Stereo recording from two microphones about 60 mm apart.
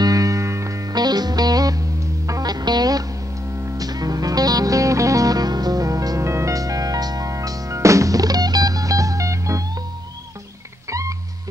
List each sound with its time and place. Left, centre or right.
0.0 s music: right
6.2 s music: right
10.9 s music: right